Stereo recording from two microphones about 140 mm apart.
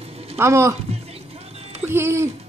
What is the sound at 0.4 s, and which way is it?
Speech, 20° right (ahead or behind).